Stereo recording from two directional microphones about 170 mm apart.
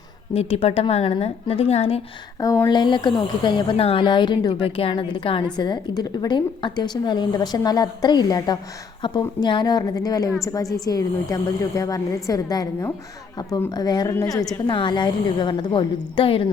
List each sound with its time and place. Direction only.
0.3 s a woman's voice: 35° left (ahead or behind)
2.4 s a woman's voice: 20° left (ahead or behind)